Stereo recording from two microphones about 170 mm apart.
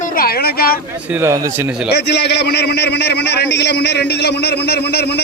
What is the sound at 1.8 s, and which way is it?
A man's voice, 75° left (ahead or behind).